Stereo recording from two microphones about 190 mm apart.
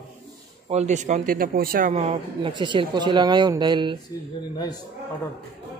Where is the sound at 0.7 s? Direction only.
35° right (ahead or behind).